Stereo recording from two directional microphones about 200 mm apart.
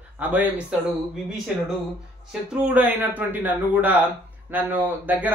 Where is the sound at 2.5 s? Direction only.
10° right (ahead or behind).